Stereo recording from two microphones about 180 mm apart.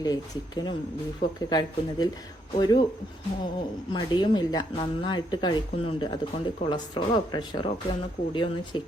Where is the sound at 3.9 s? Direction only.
25° left (ahead or behind).